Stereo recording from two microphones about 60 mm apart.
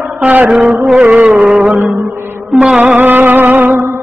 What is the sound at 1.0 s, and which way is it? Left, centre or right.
Music, right.